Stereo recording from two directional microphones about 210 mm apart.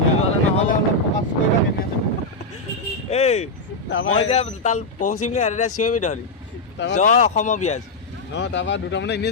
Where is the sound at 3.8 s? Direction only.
60° left (ahead or behind).